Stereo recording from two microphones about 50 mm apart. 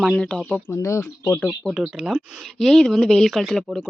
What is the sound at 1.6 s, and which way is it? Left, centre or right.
Speech, left.